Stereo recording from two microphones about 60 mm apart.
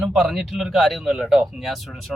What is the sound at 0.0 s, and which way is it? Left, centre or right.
Speech, centre.